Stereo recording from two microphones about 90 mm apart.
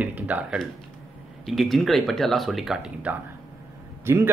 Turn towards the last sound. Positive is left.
turn(degrees=-25)  # may be behind; listen again after turning